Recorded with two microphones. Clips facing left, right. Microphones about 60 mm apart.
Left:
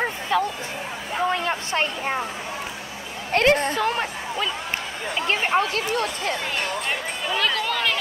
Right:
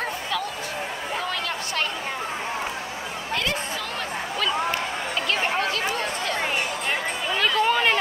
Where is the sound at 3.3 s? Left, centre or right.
Left.